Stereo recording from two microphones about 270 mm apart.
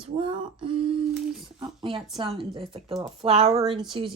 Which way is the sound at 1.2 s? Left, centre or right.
Centre.